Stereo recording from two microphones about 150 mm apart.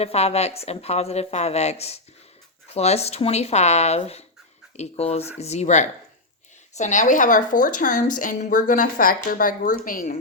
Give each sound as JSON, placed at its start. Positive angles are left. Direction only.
{"t": 0.0, "sound": "a woman's voice", "side_deg": 45}